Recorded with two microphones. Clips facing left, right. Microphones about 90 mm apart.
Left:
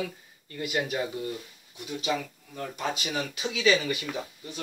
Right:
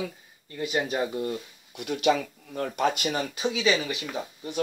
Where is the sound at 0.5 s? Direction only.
25° right (ahead or behind).